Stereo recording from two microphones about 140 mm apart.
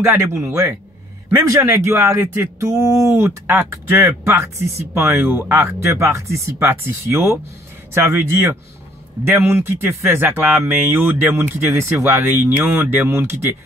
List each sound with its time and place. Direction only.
0.0 s speech: 20° right (ahead or behind)